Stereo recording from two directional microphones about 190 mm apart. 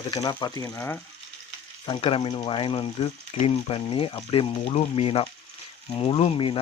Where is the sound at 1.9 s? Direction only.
30° left (ahead or behind).